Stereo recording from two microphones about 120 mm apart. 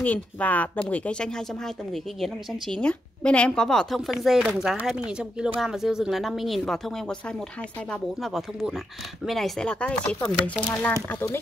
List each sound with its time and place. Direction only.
0.0 s a woman's voice: 10° left (ahead or behind)